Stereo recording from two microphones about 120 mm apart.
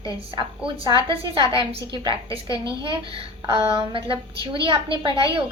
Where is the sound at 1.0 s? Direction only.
45° right (ahead or behind).